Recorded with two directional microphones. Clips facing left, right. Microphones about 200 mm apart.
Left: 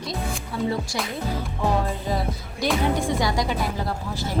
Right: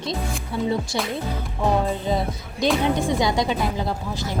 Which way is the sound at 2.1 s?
20° right (ahead or behind).